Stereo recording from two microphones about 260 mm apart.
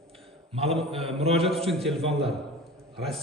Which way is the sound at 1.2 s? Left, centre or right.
Right.